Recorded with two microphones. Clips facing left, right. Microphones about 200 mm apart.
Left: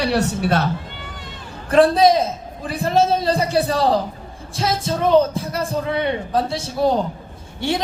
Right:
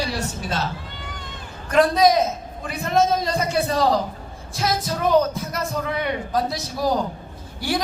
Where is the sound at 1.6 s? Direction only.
30° left (ahead or behind).